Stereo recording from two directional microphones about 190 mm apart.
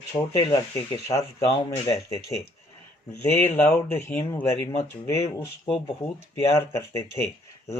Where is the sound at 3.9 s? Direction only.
15° left (ahead or behind).